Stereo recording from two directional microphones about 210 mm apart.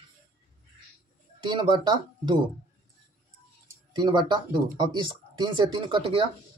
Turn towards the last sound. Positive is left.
turn(degrees=-25)  # may be behind; listen again after turning